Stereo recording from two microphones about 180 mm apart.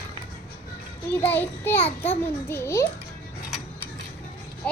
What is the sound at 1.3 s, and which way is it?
A child's voice, 10° left (ahead or behind).